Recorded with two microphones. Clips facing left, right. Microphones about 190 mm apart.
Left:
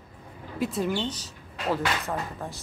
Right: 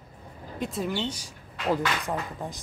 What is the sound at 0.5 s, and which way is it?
Speech, centre (ahead or behind).